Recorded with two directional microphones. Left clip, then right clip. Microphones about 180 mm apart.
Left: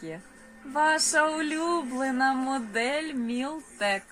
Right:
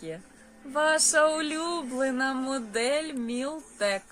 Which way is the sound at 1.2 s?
45° right (ahead or behind).